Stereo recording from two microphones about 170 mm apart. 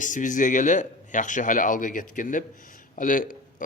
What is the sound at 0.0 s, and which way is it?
Speech, 50° left (ahead or behind).